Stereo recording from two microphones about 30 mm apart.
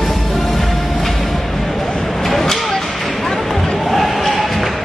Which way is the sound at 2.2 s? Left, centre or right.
Centre.